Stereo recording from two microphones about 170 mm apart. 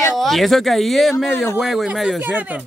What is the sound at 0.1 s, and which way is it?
Speech, centre (ahead or behind).